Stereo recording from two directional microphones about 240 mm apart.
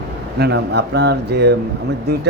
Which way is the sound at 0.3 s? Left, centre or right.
Right.